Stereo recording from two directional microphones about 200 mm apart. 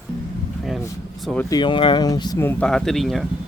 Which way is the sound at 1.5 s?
25° left (ahead or behind).